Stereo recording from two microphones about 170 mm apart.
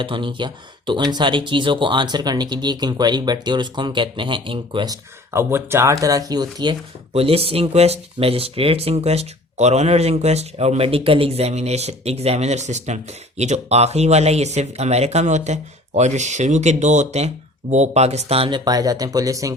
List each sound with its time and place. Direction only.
0.0 s speech: 30° right (ahead or behind)
5.3 s speech: 15° right (ahead or behind)
7.1 s speech: 35° right (ahead or behind); by 19.5 s 20° right (ahead or behind)